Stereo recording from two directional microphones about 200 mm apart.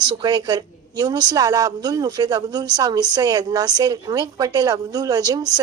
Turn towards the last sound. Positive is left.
turn(degrees=-20)  # may be behind; listen again after turning